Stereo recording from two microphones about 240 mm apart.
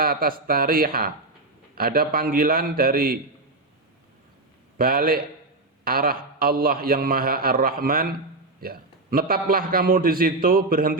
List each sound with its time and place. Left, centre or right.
0.0 s a man's voice: right
4.8 s a man's voice: right